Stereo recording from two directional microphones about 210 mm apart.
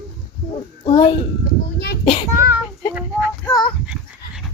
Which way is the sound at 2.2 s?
15° right (ahead or behind).